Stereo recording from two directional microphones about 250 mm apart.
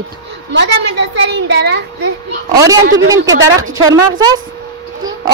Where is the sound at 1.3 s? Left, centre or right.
Right.